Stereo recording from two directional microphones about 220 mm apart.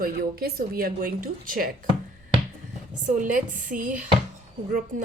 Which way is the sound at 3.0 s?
35° right (ahead or behind).